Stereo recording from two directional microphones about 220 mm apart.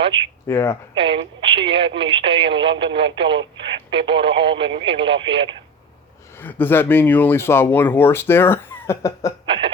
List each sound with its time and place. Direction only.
0.4 s speech: 10° left (ahead or behind)
0.9 s speech: 25° right (ahead or behind)
6.4 s speech: 10° left (ahead or behind)
9.5 s a sound: 25° right (ahead or behind)